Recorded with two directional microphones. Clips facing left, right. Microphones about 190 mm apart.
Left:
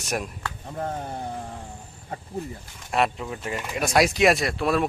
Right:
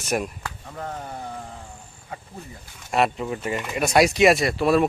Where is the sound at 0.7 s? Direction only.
30° left (ahead or behind).